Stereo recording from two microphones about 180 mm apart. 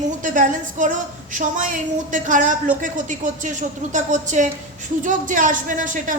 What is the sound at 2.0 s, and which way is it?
A woman's voice, 45° right (ahead or behind).